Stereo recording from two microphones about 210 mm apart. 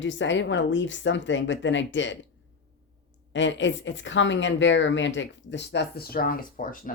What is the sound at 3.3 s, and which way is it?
A woman's voice, 60° left (ahead or behind).